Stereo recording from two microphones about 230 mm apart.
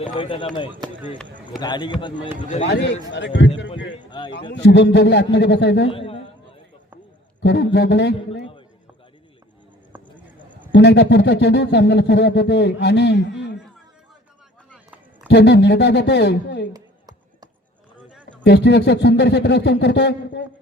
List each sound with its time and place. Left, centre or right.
0.0 s a man's voice: left
0.8 s speech: centre
1.5 s a man's voice: centre
3.1 s speech: left
4.1 s a man's voice: centre
4.5 s speech: left
5.9 s a man's voice: left
7.4 s speech: left
10.2 s a sound: centre
10.7 s speech: left
15.3 s speech: left
16.7 s a sound: centre
18.4 s speech: left